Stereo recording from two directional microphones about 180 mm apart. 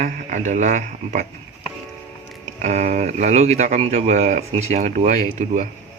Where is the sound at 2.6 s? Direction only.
40° right (ahead or behind).